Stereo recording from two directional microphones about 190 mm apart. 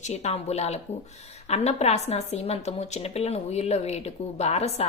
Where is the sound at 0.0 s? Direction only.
35° left (ahead or behind).